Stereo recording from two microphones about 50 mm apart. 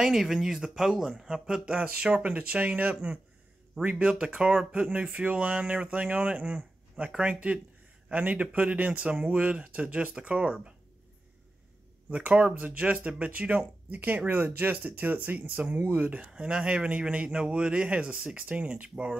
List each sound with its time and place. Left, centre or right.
0.0 s speech: centre
1.8 s a man's voice: right
12.1 s speech: right
16.2 s a man's voice: centre